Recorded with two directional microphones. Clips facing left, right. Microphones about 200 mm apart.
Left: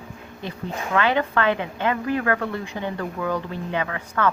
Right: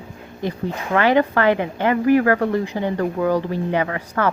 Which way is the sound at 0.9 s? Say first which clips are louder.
Right 5 dB; 25° right (ahead or behind).